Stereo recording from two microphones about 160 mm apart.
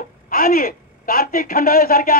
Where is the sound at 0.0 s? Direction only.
65° left (ahead or behind).